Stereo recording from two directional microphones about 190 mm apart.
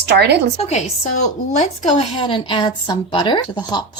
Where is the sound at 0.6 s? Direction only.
35° left (ahead or behind).